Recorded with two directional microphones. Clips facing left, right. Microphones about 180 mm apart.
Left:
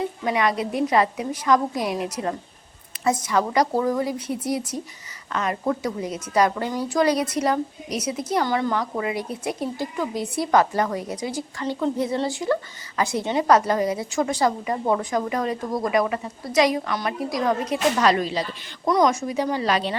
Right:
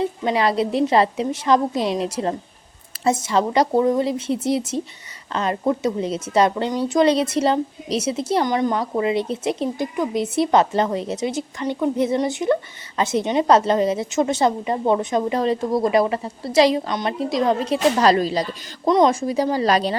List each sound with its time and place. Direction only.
0.0 s speech: 30° right (ahead or behind)
18.9 s speech: 25° right (ahead or behind)